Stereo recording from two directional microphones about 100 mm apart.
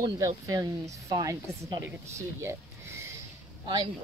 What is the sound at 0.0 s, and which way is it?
Speech, 35° right (ahead or behind).